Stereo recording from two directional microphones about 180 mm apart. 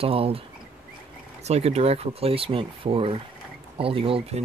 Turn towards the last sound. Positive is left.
turn(degrees=-30)  # may be behind; listen again after turning